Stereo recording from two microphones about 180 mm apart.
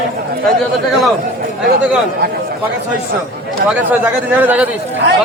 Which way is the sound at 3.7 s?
10° right (ahead or behind).